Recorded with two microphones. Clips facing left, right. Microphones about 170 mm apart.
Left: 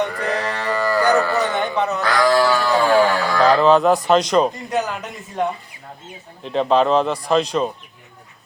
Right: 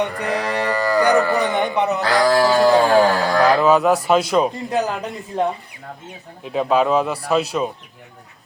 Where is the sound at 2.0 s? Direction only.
35° right (ahead or behind).